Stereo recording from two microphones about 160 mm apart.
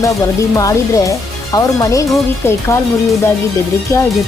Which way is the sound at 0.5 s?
20° left (ahead or behind).